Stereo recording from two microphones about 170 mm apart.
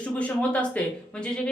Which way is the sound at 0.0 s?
5° left (ahead or behind).